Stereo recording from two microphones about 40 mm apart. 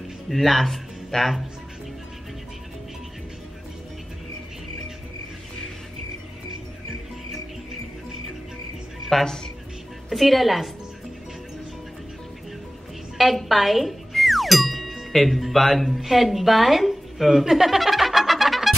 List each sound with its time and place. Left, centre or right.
0.3 s speech: centre
9.2 s a woman's voice: centre
10.0 s a woman's voice: centre
13.2 s music: centre